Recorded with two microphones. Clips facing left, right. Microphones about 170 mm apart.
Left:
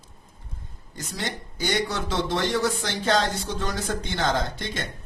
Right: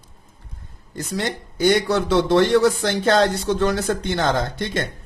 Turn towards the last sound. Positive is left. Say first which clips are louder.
# right 6 dB
turn(degrees=-55)  # may be behind; listen again after turning